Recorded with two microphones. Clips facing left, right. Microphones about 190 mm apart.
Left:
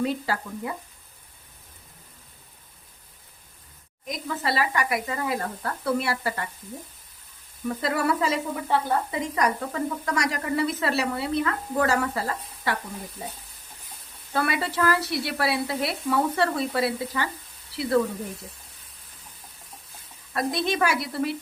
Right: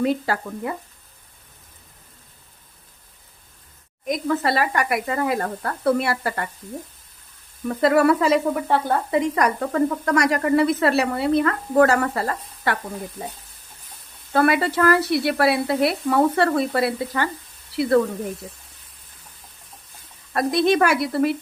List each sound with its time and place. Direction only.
0.0 s speech: 60° right (ahead or behind)
4.0 s speech: 55° right (ahead or behind)
7.8 s speech: 60° right (ahead or behind)
14.3 s speech: 55° right (ahead or behind)
20.3 s speech: 55° right (ahead or behind)